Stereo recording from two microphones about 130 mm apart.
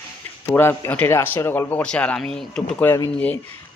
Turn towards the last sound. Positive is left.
turn(degrees=10)  # may be behind; listen again after turning